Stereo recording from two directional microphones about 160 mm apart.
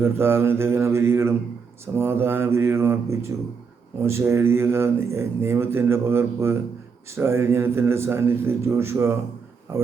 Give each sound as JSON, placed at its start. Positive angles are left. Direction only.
{"t": 0.0, "sound": "speech", "side_deg": -15}